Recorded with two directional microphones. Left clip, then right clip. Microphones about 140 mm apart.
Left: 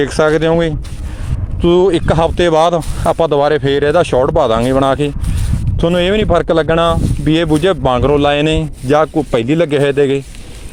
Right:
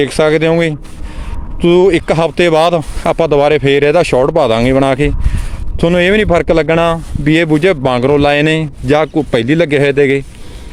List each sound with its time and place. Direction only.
0.0 s speech: 10° right (ahead or behind)
1.6 s speech: 25° right (ahead or behind)